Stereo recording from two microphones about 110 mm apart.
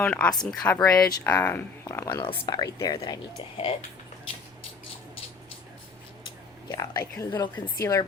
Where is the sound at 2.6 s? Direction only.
35° left (ahead or behind).